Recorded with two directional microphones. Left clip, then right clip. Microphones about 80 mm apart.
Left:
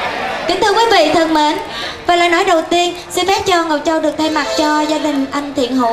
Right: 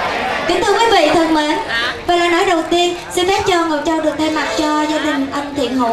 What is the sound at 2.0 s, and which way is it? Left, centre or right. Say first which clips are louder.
A woman's voice: left 3 dB; left.